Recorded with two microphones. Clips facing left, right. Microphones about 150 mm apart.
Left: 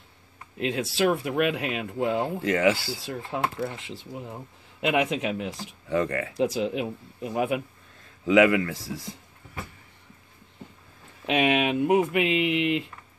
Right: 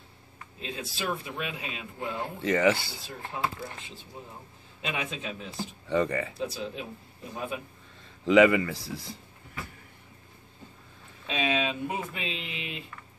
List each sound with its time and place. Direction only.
0.6 s speech: 85° left
2.4 s speech: 5° left (ahead or behind)
3.0 s speech: 80° left
5.9 s speech: centre (ahead or behind)
6.3 s speech: 90° left
8.0 s speech: centre (ahead or behind)
11.2 s speech: 70° left (ahead or behind); by 12.9 s 85° left